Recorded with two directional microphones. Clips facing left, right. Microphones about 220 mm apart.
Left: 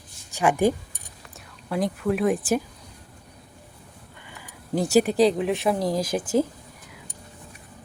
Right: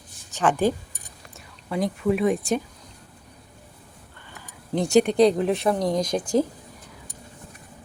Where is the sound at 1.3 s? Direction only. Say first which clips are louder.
Even; centre (ahead or behind).